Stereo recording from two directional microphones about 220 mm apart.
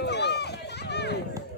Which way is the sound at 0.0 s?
50° left (ahead or behind).